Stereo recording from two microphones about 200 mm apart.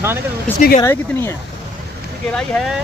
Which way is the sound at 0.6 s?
45° left (ahead or behind).